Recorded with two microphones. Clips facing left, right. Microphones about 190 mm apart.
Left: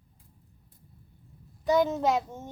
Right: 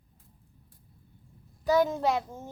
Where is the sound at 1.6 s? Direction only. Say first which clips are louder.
Left 1 dB; centre (ahead or behind).